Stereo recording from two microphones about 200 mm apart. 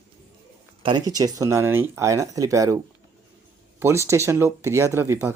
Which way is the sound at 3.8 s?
15° right (ahead or behind).